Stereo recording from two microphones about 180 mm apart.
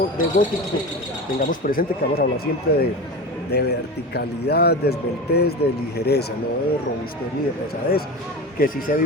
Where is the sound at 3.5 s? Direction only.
65° left (ahead or behind).